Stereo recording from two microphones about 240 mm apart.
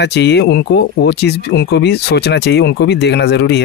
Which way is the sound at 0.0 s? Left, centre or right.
Left.